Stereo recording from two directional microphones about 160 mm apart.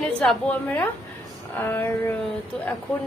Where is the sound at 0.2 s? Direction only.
5° left (ahead or behind).